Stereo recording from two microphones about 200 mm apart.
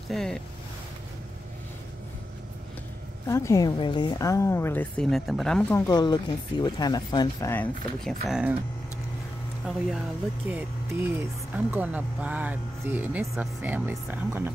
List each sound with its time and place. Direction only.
0.1 s speech: centre (ahead or behind)
3.3 s a woman's voice: 15° left (ahead or behind)
7.5 s speech: centre (ahead or behind)
10.5 s speech: 10° right (ahead or behind)